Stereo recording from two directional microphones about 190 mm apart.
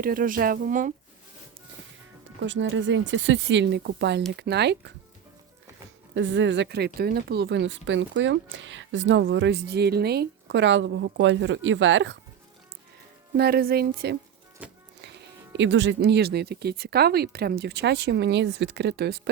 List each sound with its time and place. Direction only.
0.0 s speech: 50° right (ahead or behind)
2.4 s speech: 75° right (ahead or behind)
6.1 s speech: 75° right (ahead or behind)
13.3 s speech: 55° right (ahead or behind)
15.0 s speech: 70° right (ahead or behind)